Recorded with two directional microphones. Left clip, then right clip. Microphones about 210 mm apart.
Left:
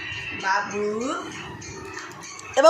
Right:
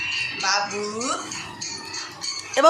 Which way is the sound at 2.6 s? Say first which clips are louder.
Left 1 dB; 10° right (ahead or behind).